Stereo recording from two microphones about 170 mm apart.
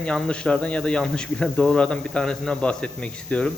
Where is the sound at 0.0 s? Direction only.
5° left (ahead or behind).